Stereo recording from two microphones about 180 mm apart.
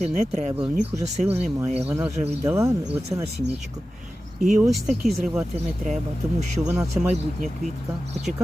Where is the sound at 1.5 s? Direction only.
5° right (ahead or behind).